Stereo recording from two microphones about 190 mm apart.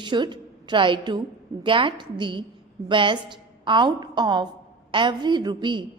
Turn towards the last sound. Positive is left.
turn(degrees=-25)  # may be behind; listen again after turning